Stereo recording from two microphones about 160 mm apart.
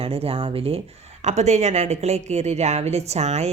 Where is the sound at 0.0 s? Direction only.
40° right (ahead or behind).